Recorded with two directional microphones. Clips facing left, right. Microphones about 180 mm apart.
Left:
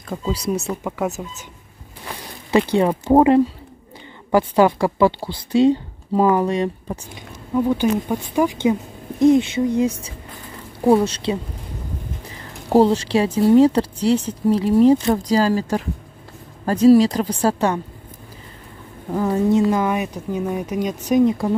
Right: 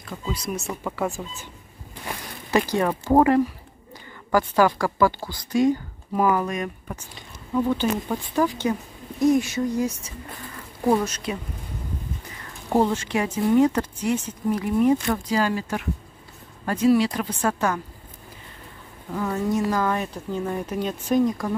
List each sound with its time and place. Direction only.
0.1 s speech: 40° left (ahead or behind)
0.8 s speech: 10° left (ahead or behind)
2.7 s a woman's voice: 20° left (ahead or behind)
7.5 s speech: 15° left (ahead or behind)
9.2 s a woman's voice: 25° left (ahead or behind)
12.6 s speech: 35° left (ahead or behind)
19.1 s speech: 35° left (ahead or behind); by 21.2 s 15° left (ahead or behind)
21.3 s a woman's voice: 25° left (ahead or behind)